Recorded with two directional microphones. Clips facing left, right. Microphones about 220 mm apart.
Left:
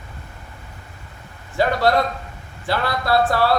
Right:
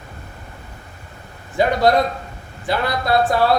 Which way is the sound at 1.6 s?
20° right (ahead or behind).